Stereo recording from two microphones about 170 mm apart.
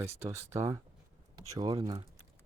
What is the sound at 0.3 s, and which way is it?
Speech, 15° right (ahead or behind).